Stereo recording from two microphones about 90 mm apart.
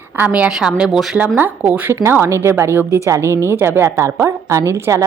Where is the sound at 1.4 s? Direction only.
20° right (ahead or behind).